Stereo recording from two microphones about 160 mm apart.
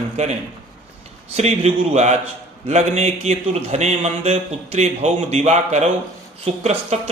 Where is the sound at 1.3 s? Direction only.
40° right (ahead or behind).